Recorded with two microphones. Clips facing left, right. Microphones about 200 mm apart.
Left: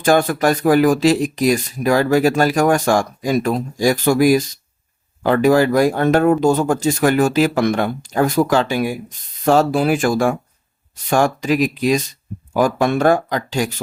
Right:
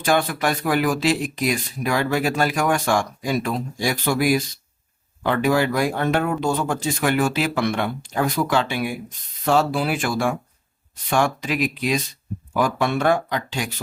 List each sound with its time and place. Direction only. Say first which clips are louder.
0.0 s speech: left 6 dB; 45° left (ahead or behind)